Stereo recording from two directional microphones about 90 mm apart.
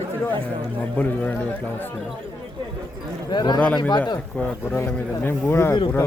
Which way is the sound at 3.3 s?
55° left (ahead or behind).